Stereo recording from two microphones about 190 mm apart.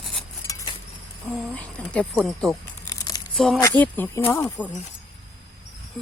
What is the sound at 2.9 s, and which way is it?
Crumpling, 20° left (ahead or behind).